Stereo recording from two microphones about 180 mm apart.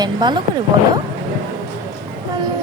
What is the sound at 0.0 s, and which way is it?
Speech, 25° right (ahead or behind).